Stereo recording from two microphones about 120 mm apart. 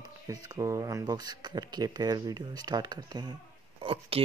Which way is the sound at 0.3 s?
30° right (ahead or behind).